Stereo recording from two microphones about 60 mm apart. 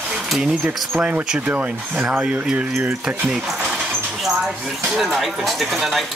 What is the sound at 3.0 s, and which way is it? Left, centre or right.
Speech, centre.